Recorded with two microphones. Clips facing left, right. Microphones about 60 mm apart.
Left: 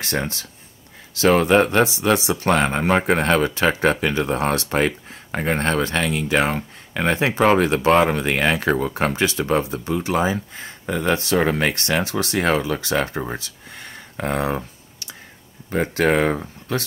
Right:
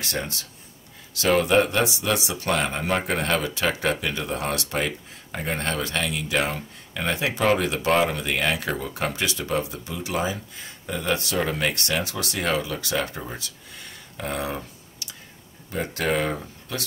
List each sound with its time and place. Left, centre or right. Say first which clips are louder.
0.0 s speech: left 5 dB; left
15.7 s speech: left 6 dB; left